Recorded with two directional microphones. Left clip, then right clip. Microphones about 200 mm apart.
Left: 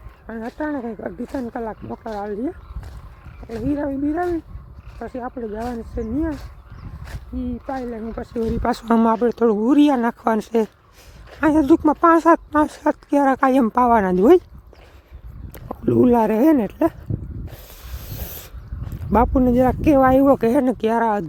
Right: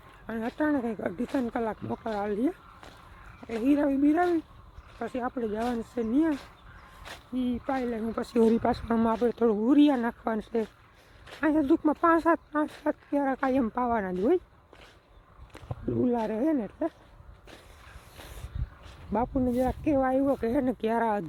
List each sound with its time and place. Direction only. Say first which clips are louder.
0.3 s speech: left 2 dB; 10° right (ahead or behind)
8.2 s speech: right 1 dB; 35° right (ahead or behind)
8.7 s speech: left 9 dB; 25° left (ahead or behind); by 14.4 s 45° left (ahead or behind)
15.7 s speech: left 12 dB; 50° left (ahead or behind)
19.1 s speech: left 11 dB; 50° left (ahead or behind); by 21.2 s 20° left (ahead or behind)